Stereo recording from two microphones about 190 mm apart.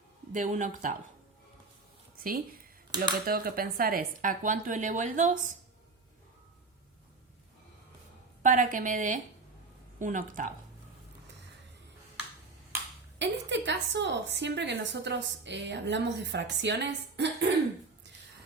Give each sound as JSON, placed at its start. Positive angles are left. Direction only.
{"t": 0.3, "sound": "speech", "side_deg": -40}
{"t": 2.2, "sound": "speech", "side_deg": -50}
{"t": 2.9, "sound": "speech", "side_deg": -20}
{"t": 3.2, "sound": "speech", "side_deg": -50}
{"t": 8.4, "sound": "speech", "side_deg": -45}
{"t": 13.1, "sound": "a woman's voice", "side_deg": -70}